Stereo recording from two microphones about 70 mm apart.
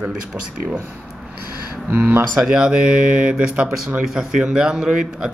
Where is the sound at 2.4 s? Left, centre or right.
Centre.